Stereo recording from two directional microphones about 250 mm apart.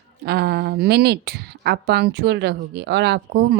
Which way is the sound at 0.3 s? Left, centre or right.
Right.